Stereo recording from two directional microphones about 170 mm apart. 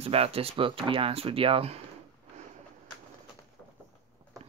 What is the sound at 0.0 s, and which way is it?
Speech, 35° right (ahead or behind).